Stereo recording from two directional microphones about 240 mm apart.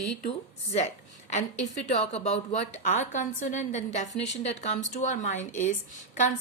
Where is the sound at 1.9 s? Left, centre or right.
Left.